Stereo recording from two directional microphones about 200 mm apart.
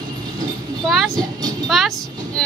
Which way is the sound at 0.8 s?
Centre (ahead or behind).